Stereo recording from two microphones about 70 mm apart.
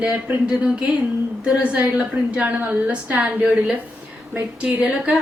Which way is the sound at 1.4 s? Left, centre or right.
Centre.